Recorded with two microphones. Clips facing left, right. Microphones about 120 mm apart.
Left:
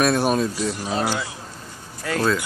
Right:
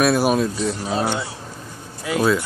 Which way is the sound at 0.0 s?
5° right (ahead or behind).